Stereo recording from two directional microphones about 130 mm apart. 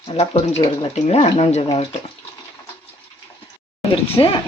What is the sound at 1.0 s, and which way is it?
Speech, 55° left (ahead or behind).